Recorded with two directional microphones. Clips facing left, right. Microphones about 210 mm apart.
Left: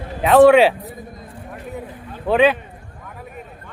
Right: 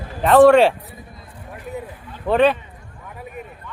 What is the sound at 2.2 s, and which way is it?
Speech, centre (ahead or behind).